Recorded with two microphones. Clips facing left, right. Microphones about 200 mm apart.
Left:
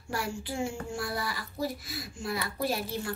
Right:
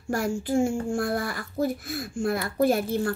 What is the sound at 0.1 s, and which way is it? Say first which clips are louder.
Speech: right 9 dB; 45° right (ahead or behind).